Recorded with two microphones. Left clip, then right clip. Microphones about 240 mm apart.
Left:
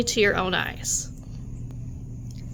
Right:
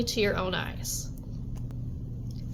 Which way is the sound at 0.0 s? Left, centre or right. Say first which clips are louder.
Left 6 dB; left.